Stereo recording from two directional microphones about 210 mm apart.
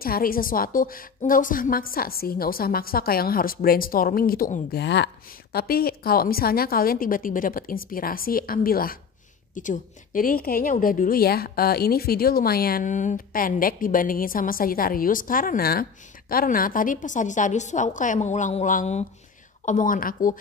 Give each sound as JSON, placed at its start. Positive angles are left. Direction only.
{"t": 0.0, "sound": "a woman's voice", "side_deg": 45}